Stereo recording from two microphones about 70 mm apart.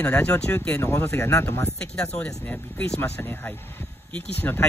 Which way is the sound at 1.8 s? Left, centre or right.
Centre.